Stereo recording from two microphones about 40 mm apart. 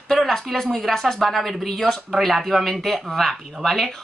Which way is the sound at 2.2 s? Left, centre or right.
Centre.